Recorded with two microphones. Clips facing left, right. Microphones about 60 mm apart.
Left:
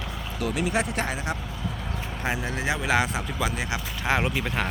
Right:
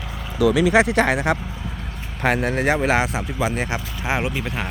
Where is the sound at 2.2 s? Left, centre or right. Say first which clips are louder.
Right 9 dB; right.